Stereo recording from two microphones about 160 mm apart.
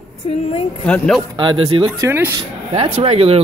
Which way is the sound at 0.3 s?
40° left (ahead or behind).